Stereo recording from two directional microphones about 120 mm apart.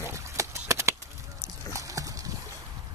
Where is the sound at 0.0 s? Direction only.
25° right (ahead or behind).